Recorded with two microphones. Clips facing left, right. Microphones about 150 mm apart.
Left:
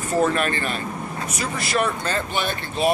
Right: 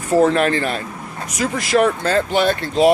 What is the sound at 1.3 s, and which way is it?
Speech, 90° right.